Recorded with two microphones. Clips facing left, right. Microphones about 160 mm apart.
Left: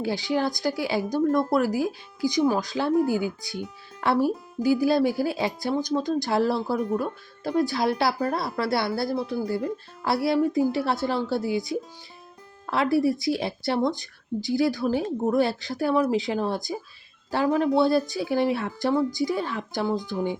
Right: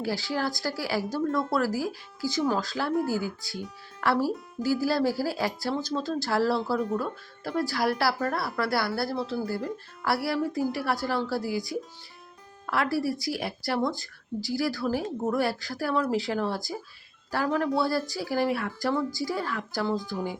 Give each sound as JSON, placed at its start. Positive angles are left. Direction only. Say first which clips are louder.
{"t": 0.0, "sound": "speech", "louder": "left 4 dB", "side_deg": 20}